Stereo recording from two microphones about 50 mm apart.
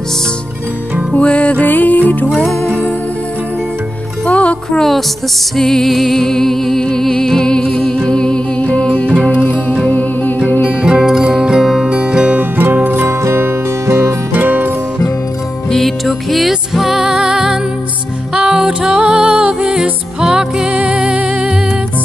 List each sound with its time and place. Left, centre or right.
1.1 s music: left
4.3 s music: left
4.6 s a sound: centre
5.6 s music: centre; by 10.8 s left
11.0 s music: centre
11.8 s music: centre
12.4 s music: right
12.9 s music: right
13.8 s music: right
14.3 s music: right
15.7 s music: centre